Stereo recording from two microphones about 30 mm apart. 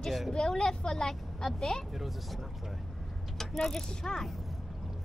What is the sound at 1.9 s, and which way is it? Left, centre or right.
Speech, centre.